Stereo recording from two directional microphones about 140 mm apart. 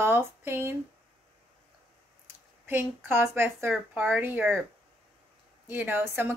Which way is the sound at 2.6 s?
15° right (ahead or behind).